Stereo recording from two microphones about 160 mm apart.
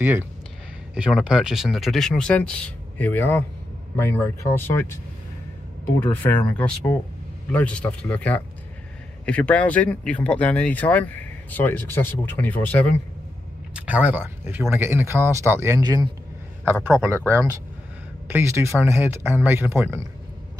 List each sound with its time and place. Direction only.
0.9 s speech: 5° right (ahead or behind); by 4.8 s 15° left (ahead or behind)
6.1 s speech: 10° left (ahead or behind)
13.7 s speech: 10° right (ahead or behind); by 16.1 s 25° right (ahead or behind)
17.3 s speech: 20° right (ahead or behind)